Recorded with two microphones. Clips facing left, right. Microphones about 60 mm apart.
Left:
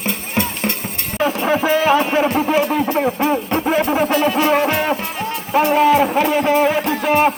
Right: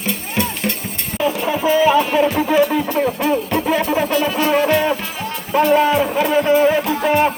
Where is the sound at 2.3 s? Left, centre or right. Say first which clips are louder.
Right 1 dB; left.